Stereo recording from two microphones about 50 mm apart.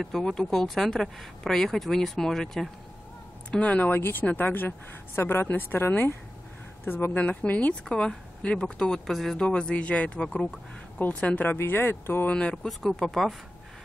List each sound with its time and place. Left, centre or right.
0.0 s speech: centre
3.5 s speech: left
3.9 s speech: left
5.5 s a woman's voice: left
7.2 s a woman's voice: left
7.9 s speech: centre
9.0 s speech: centre
9.4 s speech: centre
11.1 s a woman's voice: left
11.5 s speech: left
12.3 s speech: left
12.6 s speech: centre